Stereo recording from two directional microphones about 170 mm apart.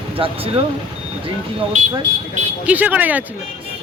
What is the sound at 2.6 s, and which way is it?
Speech, 10° right (ahead or behind).